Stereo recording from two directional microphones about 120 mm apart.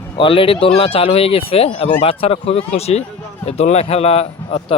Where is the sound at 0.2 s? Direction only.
45° left (ahead or behind).